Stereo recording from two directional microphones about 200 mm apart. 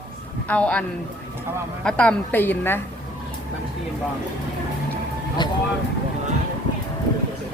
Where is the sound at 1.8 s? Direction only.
5° left (ahead or behind).